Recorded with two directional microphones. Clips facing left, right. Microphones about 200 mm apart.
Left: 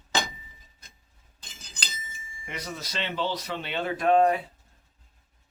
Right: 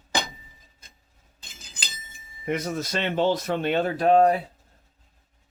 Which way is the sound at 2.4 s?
50° right (ahead or behind).